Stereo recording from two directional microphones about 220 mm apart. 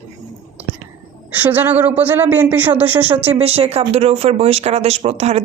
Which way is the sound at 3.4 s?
30° right (ahead or behind).